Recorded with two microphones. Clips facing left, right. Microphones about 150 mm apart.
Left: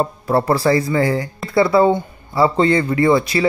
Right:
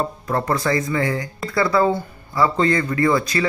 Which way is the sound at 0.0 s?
30° left (ahead or behind).